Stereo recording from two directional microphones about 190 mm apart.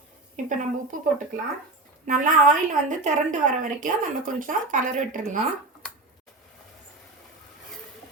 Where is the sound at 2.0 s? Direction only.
45° right (ahead or behind).